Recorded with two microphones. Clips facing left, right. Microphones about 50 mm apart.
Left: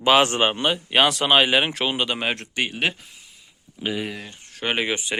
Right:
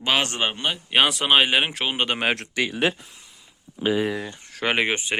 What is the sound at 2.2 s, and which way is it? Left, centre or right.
Speech, right.